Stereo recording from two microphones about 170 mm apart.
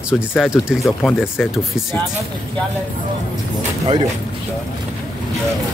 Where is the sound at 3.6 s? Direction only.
35° right (ahead or behind).